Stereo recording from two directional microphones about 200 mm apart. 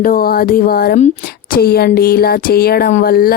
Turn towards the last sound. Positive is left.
turn(degrees=50)  # may be behind; listen again after turning